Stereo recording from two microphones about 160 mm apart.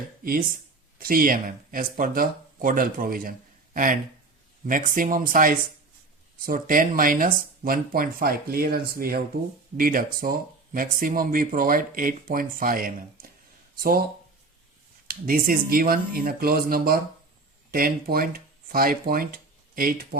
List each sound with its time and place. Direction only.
0.9 s speech: 65° right (ahead or behind)
4.7 s speech: 55° right (ahead or behind)
15.0 s speech: 65° right (ahead or behind)